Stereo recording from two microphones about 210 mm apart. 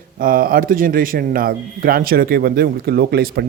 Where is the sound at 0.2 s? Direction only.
45° right (ahead or behind).